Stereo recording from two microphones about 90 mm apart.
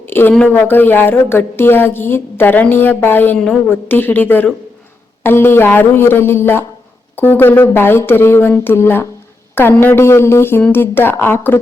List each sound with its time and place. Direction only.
0.0 s a sound: 25° left (ahead or behind)
0.4 s a woman's voice: 20° left (ahead or behind)
3.3 s a woman's voice: 10° left (ahead or behind)
3.7 s a woman's voice: 20° left (ahead or behind)